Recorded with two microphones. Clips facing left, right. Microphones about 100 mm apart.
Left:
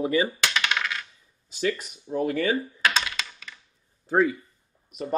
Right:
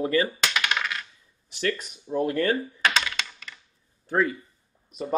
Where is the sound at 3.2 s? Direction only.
Centre (ahead or behind).